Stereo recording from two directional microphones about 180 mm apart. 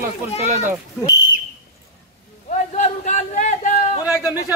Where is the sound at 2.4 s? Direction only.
40° left (ahead or behind).